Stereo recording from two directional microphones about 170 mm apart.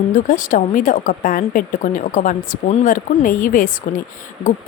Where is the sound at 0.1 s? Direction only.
50° left (ahead or behind).